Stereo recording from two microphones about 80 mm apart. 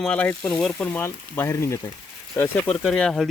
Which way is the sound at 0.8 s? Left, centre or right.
Left.